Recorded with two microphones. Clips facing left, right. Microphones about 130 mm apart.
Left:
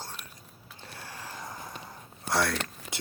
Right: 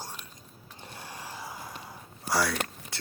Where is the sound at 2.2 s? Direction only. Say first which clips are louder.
Even; centre (ahead or behind).